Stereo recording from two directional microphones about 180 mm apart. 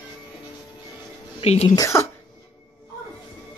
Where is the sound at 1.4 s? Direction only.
35° left (ahead or behind).